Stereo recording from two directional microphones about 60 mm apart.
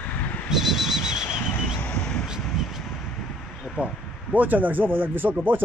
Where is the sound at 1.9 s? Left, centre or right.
Centre.